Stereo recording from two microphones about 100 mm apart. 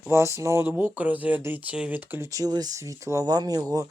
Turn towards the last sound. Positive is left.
turn(degrees=-40)  # may be behind; listen again after turning